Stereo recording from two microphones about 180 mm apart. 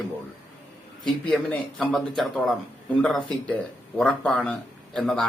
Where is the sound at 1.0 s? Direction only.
5° left (ahead or behind).